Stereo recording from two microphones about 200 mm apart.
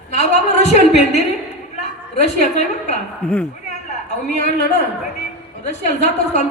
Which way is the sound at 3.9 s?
35° left (ahead or behind).